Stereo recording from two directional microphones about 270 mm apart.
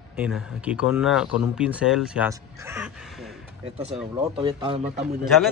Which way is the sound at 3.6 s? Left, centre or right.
Right.